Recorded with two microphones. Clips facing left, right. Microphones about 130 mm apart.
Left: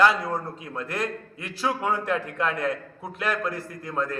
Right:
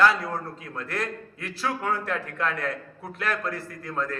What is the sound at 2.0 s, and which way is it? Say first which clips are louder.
Speech: left 4 dB; centre (ahead or behind).